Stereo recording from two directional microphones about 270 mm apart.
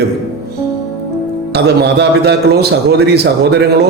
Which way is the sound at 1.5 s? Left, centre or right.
Right.